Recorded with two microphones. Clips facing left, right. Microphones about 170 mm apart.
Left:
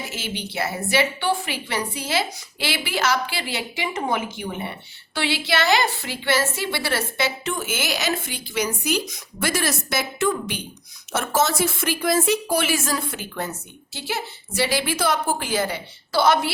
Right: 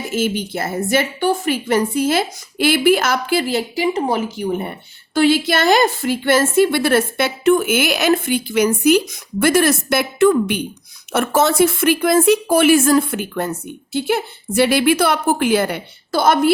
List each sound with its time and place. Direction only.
0.0 s a woman's voice: 50° right (ahead or behind)